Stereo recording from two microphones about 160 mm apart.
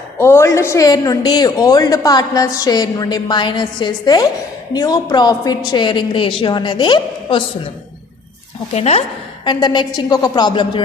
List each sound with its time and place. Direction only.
0.2 s a woman's voice: 15° left (ahead or behind)
8.7 s a woman's voice: 40° left (ahead or behind)